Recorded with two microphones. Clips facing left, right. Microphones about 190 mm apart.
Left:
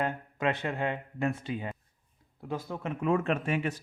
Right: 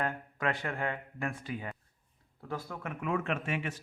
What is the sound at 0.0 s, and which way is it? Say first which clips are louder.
Speech: left 3 dB; 20° left (ahead or behind).